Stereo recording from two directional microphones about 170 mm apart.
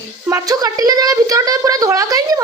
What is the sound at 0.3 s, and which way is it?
Speech, 20° right (ahead or behind).